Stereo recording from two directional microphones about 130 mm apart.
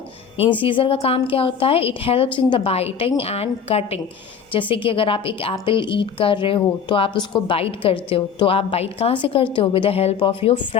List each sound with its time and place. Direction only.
0.6 s a woman's voice: 40° left (ahead or behind)